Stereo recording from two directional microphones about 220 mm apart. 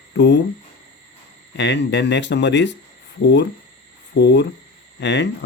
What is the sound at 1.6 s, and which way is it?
Speech, 50° left (ahead or behind).